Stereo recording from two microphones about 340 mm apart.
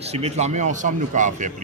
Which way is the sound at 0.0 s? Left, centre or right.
Centre.